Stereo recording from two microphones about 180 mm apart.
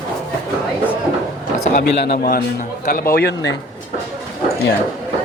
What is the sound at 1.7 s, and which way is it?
A man's voice, 60° left (ahead or behind).